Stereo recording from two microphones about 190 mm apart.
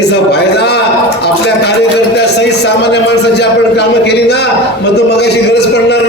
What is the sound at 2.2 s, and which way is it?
A man's voice, 60° left (ahead or behind).